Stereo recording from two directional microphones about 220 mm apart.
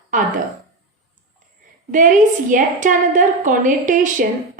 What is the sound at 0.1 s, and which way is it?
Speech, 35° right (ahead or behind).